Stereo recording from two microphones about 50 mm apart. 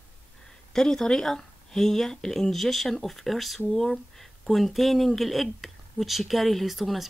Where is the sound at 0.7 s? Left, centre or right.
Centre.